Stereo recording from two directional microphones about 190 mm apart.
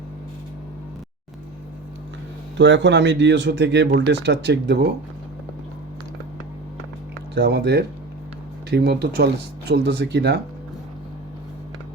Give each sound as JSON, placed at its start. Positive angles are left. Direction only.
{"t": 2.6, "sound": "speech", "side_deg": -70}
{"t": 7.3, "sound": "speech", "side_deg": -60}